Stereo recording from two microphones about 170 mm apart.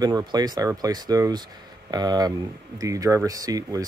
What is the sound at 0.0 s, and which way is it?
Speech, 25° right (ahead or behind).